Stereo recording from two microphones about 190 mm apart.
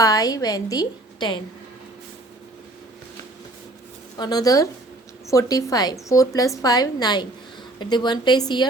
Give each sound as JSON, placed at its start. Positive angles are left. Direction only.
{"t": 0.0, "sound": "a woman's voice", "side_deg": 20}
{"t": 4.2, "sound": "a woman's voice", "side_deg": 20}